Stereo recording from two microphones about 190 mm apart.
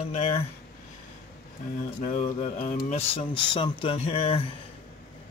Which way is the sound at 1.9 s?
40° left (ahead or behind).